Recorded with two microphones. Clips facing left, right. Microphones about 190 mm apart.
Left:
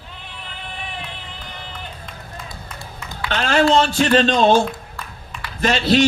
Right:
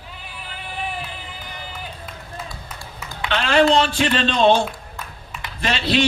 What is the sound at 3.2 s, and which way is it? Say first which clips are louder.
A man's voice: even; 45° left (ahead or behind).